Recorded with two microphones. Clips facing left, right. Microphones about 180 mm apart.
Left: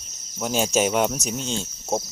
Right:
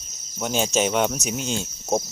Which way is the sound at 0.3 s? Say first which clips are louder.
Left 1 dB; 5° left (ahead or behind).